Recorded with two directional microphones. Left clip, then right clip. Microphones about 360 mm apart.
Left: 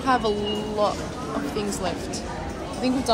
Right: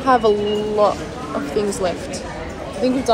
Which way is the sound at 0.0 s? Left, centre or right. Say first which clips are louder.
Right 7 dB; centre.